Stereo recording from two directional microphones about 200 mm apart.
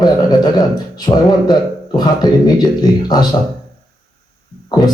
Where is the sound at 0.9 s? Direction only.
20° left (ahead or behind).